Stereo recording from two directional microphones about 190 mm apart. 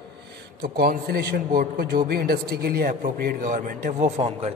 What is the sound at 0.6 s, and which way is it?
A man's voice, 55° right (ahead or behind).